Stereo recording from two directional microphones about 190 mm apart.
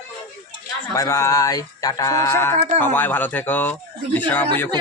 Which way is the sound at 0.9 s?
15° left (ahead or behind).